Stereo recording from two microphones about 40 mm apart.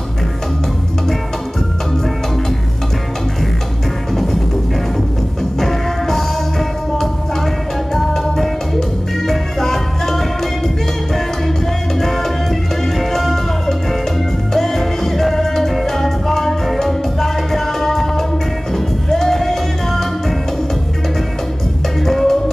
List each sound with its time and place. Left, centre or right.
4.1 s music: centre
5.6 s music: centre
7.9 s music: centre
12.0 s music: centre
22.0 s music: centre